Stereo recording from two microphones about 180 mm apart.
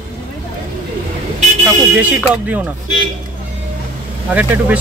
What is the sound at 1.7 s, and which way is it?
Speech, 10° right (ahead or behind).